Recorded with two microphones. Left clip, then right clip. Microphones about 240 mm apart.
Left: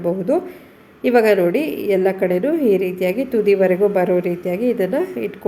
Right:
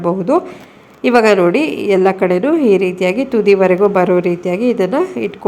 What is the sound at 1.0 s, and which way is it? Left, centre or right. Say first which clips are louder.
A woman's voice: right 4 dB; centre.